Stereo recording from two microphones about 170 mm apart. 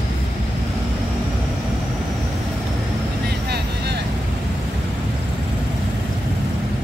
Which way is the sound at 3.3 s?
75° right (ahead or behind).